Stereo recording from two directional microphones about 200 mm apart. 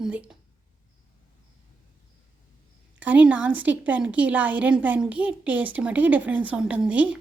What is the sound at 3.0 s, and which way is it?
A woman's voice, 10° right (ahead or behind).